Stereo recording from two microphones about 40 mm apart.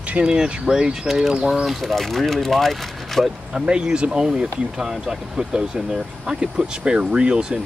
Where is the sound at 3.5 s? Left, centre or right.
Right.